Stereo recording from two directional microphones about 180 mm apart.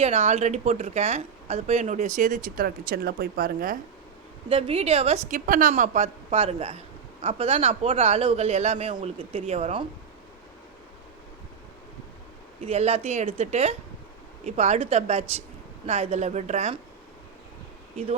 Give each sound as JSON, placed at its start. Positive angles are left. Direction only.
{"t": 0.0, "sound": "speech", "side_deg": -35}
{"t": 4.4, "sound": "speech", "side_deg": -30}
{"t": 5.5, "sound": "speech", "side_deg": -50}
{"t": 12.6, "sound": "speech", "side_deg": -35}